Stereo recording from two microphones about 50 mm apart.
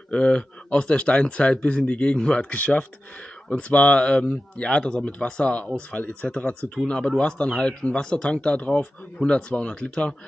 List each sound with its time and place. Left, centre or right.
0.1 s speech: centre
2.5 s speech: left